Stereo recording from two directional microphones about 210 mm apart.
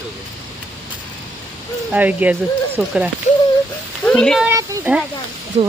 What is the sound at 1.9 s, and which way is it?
Speech, 5° right (ahead or behind).